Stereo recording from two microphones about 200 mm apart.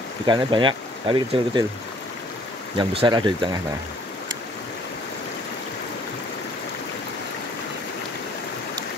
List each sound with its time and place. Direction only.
0.3 s speech: 20° right (ahead or behind)
2.8 s speech: 25° right (ahead or behind)